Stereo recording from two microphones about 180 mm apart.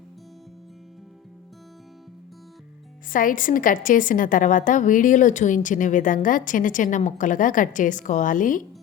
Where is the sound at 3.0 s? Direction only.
50° left (ahead or behind).